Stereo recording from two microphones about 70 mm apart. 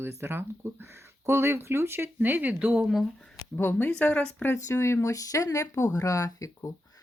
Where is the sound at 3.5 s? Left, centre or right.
Left.